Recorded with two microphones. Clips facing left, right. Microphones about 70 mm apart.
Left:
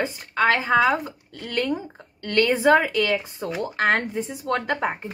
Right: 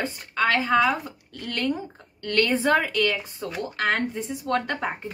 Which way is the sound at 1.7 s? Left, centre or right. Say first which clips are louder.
Left 2 dB; centre.